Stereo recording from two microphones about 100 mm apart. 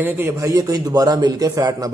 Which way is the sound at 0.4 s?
35° right (ahead or behind).